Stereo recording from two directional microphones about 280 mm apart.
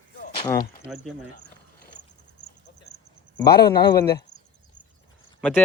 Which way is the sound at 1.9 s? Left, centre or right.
Left.